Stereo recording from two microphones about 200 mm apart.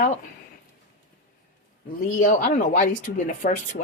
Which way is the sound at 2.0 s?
40° left (ahead or behind).